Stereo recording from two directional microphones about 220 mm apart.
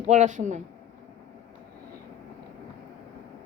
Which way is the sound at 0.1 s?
35° right (ahead or behind).